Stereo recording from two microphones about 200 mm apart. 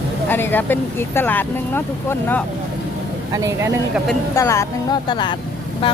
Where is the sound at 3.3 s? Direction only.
15° right (ahead or behind).